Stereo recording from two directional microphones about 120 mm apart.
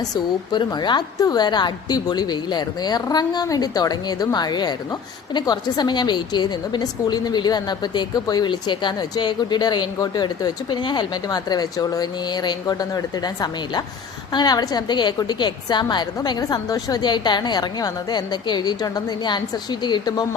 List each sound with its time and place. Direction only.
0.0 s a woman's voice: 35° left (ahead or behind)